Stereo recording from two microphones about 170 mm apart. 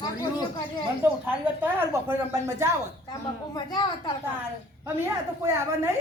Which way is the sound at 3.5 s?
25° left (ahead or behind).